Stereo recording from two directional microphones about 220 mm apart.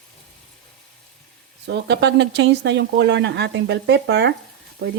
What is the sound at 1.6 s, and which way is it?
Speech, 50° right (ahead or behind).